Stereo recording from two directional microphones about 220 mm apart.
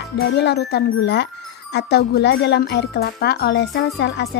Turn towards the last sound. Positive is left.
turn(degrees=50)  # may be behind; listen again after turning